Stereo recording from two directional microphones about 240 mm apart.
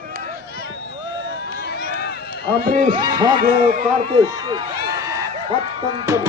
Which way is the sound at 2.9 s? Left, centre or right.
Centre.